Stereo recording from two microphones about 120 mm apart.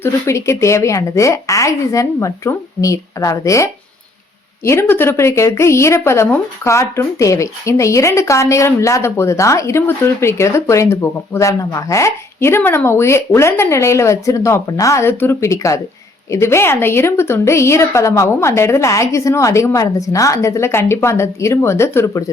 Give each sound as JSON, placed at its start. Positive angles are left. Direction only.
{"t": 0.0, "sound": "speech", "side_deg": 25}